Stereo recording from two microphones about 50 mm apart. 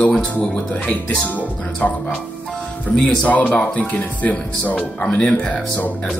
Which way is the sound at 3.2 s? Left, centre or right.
Left.